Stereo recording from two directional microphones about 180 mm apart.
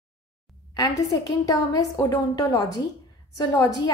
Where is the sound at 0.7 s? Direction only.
20° left (ahead or behind).